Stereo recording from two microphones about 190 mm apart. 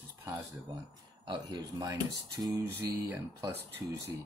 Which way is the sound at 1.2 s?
25° right (ahead or behind).